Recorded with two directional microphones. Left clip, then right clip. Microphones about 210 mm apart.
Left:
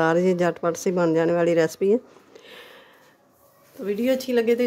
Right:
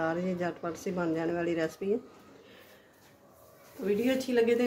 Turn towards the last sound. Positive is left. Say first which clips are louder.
# left 6 dB
turn(degrees=40)  # may be behind; listen again after turning